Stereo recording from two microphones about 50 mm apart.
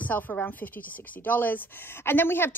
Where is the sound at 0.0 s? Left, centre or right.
Left.